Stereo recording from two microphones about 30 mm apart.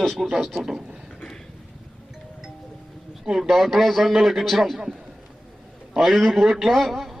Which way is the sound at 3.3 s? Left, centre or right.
Centre.